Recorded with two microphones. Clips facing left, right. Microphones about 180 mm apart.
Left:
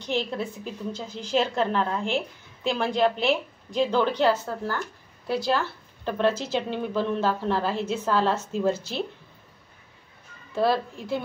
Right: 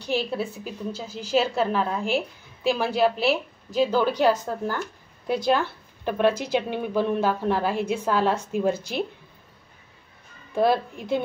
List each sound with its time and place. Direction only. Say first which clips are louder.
0.0 s a woman's voice: right 2 dB; 10° right (ahead or behind)
10.5 s a woman's voice: right 2 dB; 15° right (ahead or behind)